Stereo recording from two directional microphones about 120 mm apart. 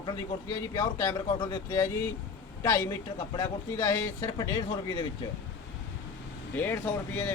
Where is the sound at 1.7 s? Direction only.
25° left (ahead or behind).